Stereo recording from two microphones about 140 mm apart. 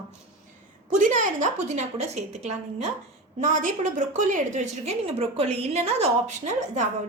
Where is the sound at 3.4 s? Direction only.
65° right (ahead or behind).